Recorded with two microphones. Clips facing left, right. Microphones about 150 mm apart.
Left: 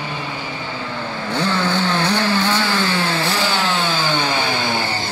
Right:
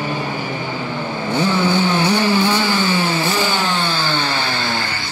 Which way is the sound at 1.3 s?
5° right (ahead or behind).